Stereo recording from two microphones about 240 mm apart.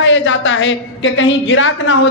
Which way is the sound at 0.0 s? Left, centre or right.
Left.